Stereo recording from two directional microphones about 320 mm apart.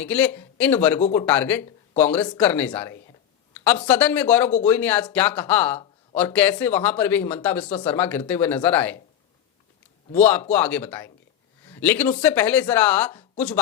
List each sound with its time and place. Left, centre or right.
0.0 s speech: centre
10.2 s speech: centre